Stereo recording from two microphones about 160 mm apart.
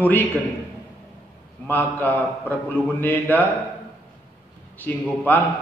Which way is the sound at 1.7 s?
10° left (ahead or behind).